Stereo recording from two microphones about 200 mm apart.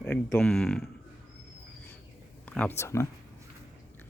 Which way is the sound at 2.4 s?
5° left (ahead or behind).